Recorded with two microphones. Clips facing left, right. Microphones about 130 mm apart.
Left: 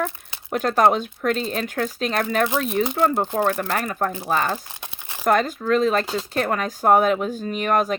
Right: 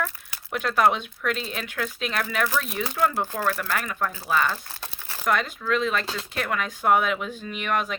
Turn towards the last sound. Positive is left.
turn(degrees=40)  # may be behind; listen again after turning